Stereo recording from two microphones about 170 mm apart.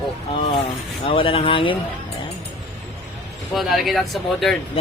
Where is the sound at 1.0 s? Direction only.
30° left (ahead or behind).